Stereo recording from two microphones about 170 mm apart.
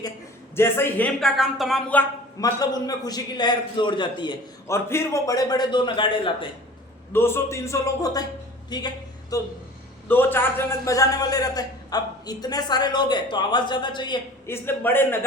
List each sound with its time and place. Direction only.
0.5 s speech: 15° left (ahead or behind)
2.4 s a man's voice: 20° left (ahead or behind)
7.1 s a man's voice: 15° left (ahead or behind)
14.4 s speech: 15° left (ahead or behind)